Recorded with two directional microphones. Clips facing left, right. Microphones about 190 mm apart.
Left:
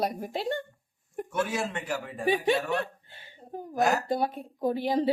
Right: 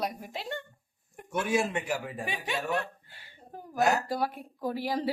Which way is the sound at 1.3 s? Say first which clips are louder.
Right 2 dB; 15° right (ahead or behind).